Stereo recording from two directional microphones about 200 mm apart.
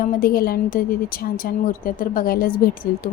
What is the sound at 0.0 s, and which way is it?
Speech, 45° left (ahead or behind).